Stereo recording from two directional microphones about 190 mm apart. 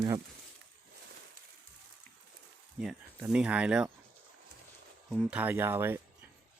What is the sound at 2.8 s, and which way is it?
Speech, 5° right (ahead or behind).